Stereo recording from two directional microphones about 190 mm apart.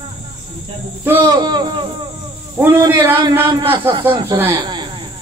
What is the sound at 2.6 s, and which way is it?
Speech, 10° right (ahead or behind).